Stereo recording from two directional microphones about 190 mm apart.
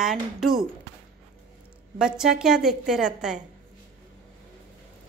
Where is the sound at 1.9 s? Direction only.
5° right (ahead or behind).